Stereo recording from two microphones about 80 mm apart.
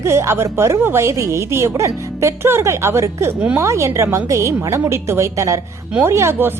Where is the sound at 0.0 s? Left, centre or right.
Right.